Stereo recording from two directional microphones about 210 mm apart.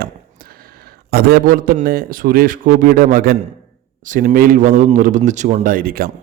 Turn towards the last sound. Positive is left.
turn(degrees=-45)  # may be behind; listen again after turning